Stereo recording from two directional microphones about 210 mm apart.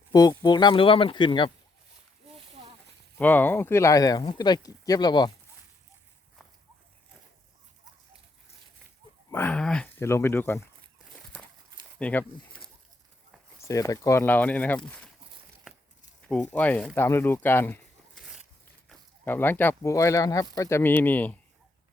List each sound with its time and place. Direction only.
0.1 s speech: 20° left (ahead or behind)
3.2 s speech: 10° left (ahead or behind)
9.3 s speech: 10° left (ahead or behind)
11.9 s speech: 5° left (ahead or behind)
13.6 s speech: 15° left (ahead or behind)
16.3 s speech: 5° left (ahead or behind)
18.9 s speech: 10° left (ahead or behind)